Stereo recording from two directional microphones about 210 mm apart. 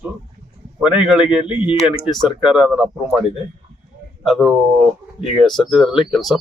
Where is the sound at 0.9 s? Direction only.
5° right (ahead or behind).